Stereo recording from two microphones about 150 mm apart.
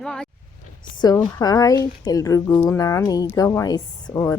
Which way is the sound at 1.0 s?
25° left (ahead or behind).